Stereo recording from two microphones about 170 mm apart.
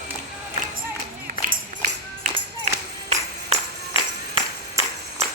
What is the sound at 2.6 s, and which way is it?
Music, 40° right (ahead or behind).